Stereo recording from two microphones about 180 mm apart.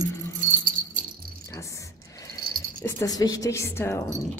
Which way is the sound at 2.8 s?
20° left (ahead or behind).